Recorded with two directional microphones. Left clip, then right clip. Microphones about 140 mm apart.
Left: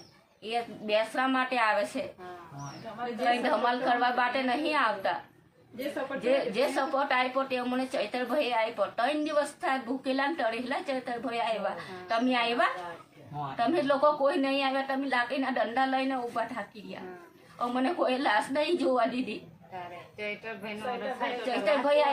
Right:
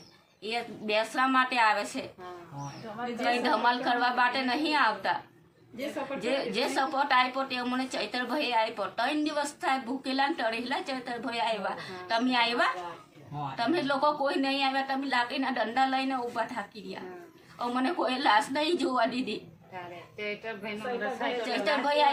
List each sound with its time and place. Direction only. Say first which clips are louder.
0.4 s a woman's voice: even; 15° left (ahead or behind)
3.2 s a woman's voice: right 1 dB; 15° left (ahead or behind)
6.1 s a woman's voice: left 3 dB; 20° left (ahead or behind)
17.6 s a woman's voice: left 1 dB; 15° left (ahead or behind)
20.1 s a woman's voice: right 1 dB; 20° right (ahead or behind)
21.2 s a woman's voice: even; 15° left (ahead or behind)